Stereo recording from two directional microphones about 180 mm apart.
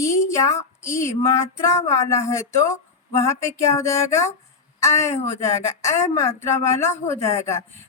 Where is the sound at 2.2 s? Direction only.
15° left (ahead or behind).